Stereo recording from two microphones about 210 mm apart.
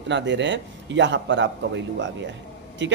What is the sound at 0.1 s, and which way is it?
Speech, 55° right (ahead or behind).